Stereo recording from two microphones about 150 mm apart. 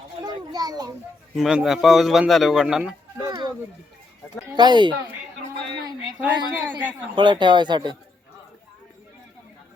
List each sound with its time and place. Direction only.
0.2 s children playing: 25° right (ahead or behind)
1.4 s speech: 5° right (ahead or behind)
4.5 s speech: 30° right (ahead or behind)
6.1 s a man's voice: 10° right (ahead or behind)
7.2 s speech: 30° right (ahead or behind)